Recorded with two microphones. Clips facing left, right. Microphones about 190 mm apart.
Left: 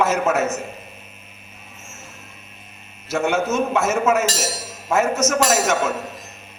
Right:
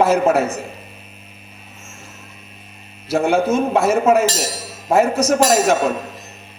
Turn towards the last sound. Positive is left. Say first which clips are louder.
# right 4 dB
turn(degrees=-35)  # may be behind; listen again after turning